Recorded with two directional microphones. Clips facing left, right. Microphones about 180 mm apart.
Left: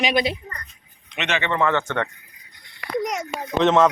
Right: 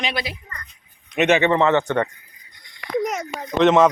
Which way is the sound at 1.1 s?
40° right (ahead or behind).